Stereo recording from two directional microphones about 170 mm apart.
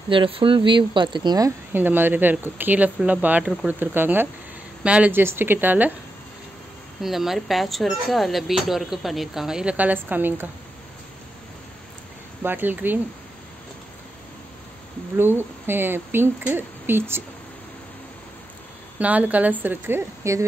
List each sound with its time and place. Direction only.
0.1 s speech: 30° right (ahead or behind)
1.7 s speech: 10° right (ahead or behind)
7.0 s speech: centre (ahead or behind)
12.4 s speech: 10° right (ahead or behind)
15.1 s speech: 15° right (ahead or behind)
18.9 s speech: 10° right (ahead or behind)